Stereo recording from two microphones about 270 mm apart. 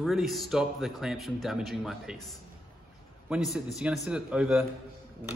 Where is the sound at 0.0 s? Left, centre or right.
Centre.